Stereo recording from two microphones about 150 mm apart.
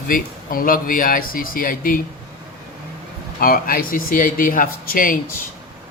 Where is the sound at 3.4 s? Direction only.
75° left (ahead or behind).